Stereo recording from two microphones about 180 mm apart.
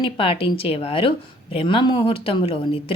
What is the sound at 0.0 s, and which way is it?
Speech, 30° left (ahead or behind).